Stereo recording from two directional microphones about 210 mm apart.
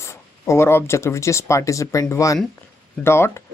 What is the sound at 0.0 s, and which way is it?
Speech, 15° left (ahead or behind).